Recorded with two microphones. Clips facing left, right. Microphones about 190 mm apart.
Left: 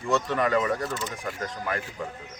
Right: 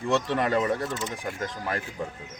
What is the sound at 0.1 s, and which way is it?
Speech, 30° right (ahead or behind).